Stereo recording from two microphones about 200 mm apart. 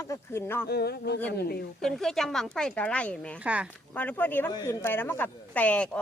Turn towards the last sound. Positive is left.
turn(degrees=5)  # may be behind; listen again after turning